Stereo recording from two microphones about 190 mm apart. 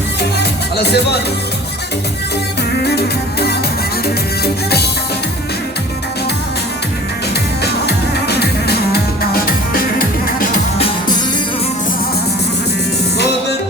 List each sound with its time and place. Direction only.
0.2 s music: 60° left (ahead or behind)
4.4 s music: 55° left (ahead or behind)
7.6 s music: 60° left (ahead or behind)